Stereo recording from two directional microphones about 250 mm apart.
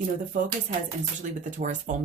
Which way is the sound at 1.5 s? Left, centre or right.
Right.